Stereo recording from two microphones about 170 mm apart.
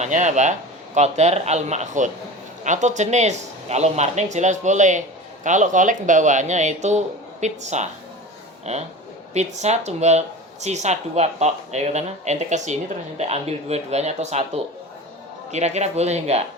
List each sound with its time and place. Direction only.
0.0 s speech: 45° right (ahead or behind)
15.5 s speech: 40° right (ahead or behind)